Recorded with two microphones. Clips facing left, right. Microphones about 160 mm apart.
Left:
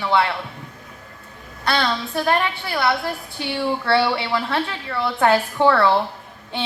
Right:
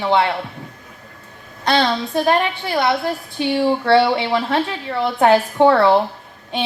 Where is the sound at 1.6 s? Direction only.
25° right (ahead or behind).